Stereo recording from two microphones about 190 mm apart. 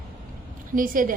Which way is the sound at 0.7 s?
45° right (ahead or behind).